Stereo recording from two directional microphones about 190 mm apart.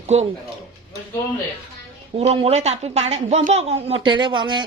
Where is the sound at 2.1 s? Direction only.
35° right (ahead or behind).